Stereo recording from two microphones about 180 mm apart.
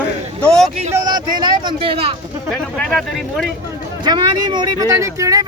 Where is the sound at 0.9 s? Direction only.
20° right (ahead or behind).